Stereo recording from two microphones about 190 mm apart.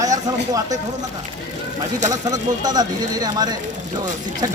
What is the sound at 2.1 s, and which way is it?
Speech, 20° right (ahead or behind).